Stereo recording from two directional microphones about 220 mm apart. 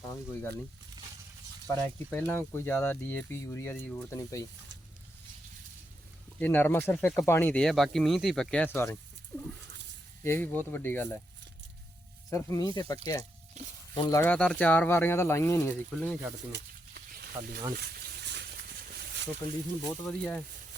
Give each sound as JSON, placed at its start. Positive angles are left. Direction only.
{"t": 1.7, "sound": "speech", "side_deg": 10}
{"t": 6.4, "sound": "speech", "side_deg": 10}
{"t": 9.3, "sound": "a sound", "side_deg": 10}
{"t": 10.2, "sound": "speech", "side_deg": 10}
{"t": 12.3, "sound": "speech", "side_deg": 15}
{"t": 13.6, "sound": "speech", "side_deg": -30}
{"t": 13.9, "sound": "speech", "side_deg": 15}
{"t": 16.5, "sound": "a sound", "side_deg": -45}
{"t": 19.9, "sound": "speech", "side_deg": 5}